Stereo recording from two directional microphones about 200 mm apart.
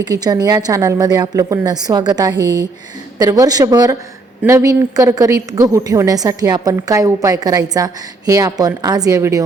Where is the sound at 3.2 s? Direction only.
15° right (ahead or behind).